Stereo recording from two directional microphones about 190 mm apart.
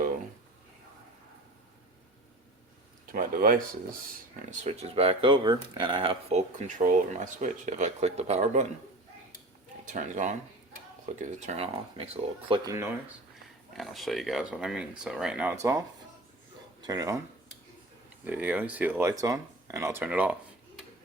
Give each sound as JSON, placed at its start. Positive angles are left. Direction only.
{"t": 3.1, "sound": "speech", "side_deg": -50}
{"t": 4.6, "sound": "speech", "side_deg": -30}
{"t": 9.8, "sound": "speech", "side_deg": -40}
{"t": 12.7, "sound": "speech", "side_deg": -15}
{"t": 13.7, "sound": "speech", "side_deg": 0}
{"t": 16.8, "sound": "speech", "side_deg": -20}
{"t": 18.3, "sound": "speech", "side_deg": -10}